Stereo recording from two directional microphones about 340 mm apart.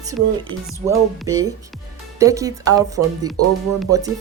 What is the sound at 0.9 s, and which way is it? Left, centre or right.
Speech, centre.